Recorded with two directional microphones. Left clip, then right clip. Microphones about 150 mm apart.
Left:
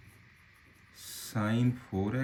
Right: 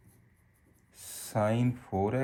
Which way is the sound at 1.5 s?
20° right (ahead or behind).